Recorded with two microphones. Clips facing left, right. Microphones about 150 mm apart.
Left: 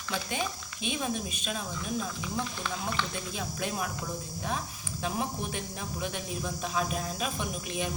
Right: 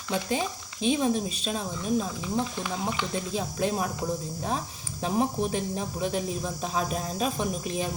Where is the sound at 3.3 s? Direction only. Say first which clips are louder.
Right 7 dB; 30° right (ahead or behind).